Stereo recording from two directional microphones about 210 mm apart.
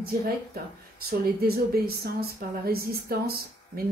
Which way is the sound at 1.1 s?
45° right (ahead or behind).